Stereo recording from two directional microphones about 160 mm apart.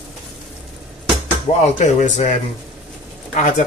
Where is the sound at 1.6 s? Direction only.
45° left (ahead or behind).